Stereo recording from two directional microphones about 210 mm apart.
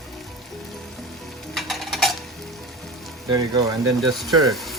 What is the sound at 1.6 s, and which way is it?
Tick-tock, centre (ahead or behind).